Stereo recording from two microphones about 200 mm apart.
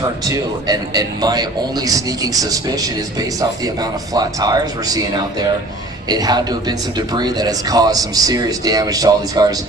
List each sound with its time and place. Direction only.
0.0 s speech: 20° right (ahead or behind)